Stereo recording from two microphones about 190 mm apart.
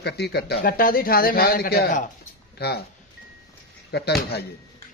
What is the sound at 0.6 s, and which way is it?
A man's voice, 50° left (ahead or behind).